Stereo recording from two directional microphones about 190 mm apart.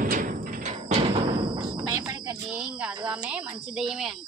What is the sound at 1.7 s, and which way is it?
Music, 20° right (ahead or behind).